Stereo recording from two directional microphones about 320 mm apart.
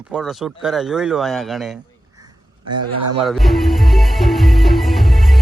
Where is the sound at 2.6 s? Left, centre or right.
Right.